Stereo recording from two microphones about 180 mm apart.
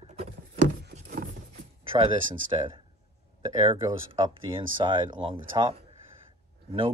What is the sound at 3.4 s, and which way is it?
Speech, 30° right (ahead or behind).